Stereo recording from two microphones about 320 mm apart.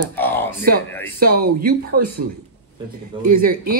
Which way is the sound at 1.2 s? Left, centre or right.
Right.